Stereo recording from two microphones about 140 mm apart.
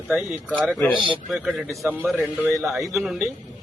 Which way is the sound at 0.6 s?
10° left (ahead or behind).